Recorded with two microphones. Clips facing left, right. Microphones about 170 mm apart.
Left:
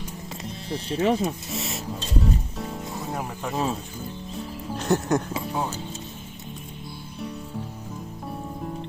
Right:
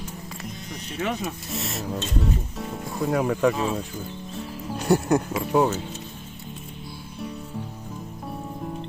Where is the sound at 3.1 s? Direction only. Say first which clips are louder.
Right 13 dB; 85° right.